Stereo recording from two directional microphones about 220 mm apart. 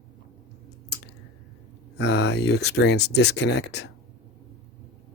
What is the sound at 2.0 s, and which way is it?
Speech, 50° left (ahead or behind).